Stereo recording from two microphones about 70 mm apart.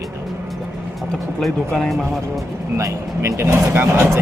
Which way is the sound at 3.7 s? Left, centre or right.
Right.